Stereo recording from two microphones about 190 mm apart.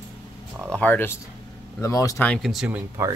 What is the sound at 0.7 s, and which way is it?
Speech, 10° left (ahead or behind).